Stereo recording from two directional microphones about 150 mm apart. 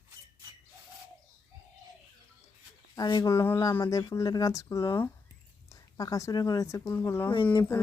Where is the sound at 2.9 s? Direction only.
25° left (ahead or behind).